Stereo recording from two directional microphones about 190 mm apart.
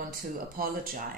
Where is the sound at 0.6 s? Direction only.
50° right (ahead or behind).